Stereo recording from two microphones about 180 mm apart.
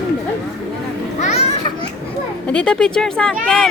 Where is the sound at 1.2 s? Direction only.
40° left (ahead or behind).